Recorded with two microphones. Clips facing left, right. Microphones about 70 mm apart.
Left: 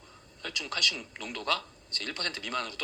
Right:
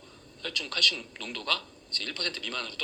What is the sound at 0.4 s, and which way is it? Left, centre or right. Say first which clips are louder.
Speech: right 2 dB; centre.